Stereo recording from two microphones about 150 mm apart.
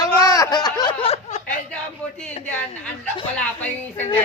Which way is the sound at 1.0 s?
45° left (ahead or behind).